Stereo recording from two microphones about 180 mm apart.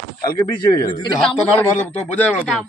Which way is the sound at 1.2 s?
5° left (ahead or behind).